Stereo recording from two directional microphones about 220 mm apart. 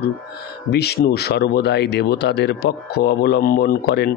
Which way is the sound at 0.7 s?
45° left (ahead or behind).